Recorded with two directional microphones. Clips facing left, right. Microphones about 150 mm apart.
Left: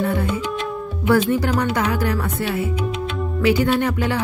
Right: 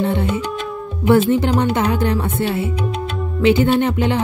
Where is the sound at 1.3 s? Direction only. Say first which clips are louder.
Right 3 dB; 25° right (ahead or behind).